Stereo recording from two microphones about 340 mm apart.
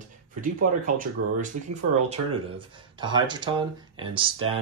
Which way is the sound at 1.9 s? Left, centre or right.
Centre.